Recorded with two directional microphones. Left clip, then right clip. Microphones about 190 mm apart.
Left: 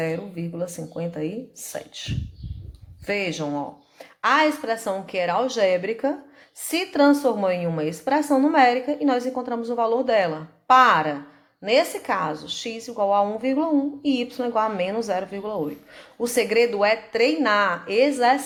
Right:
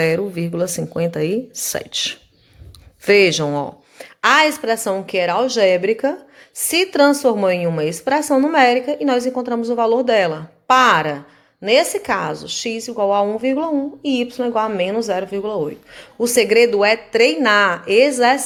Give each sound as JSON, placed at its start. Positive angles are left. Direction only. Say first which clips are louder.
{"t": 0.0, "sound": "a woman's voice", "louder": "right 10 dB", "side_deg": -55}